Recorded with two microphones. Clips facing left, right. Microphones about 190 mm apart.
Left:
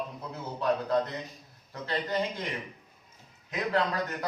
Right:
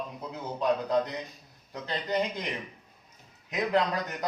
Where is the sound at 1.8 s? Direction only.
15° right (ahead or behind).